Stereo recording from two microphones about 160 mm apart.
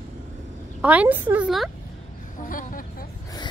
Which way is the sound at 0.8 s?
10° right (ahead or behind).